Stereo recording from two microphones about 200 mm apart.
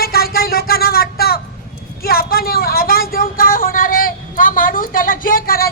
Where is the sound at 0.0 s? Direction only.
50° left (ahead or behind).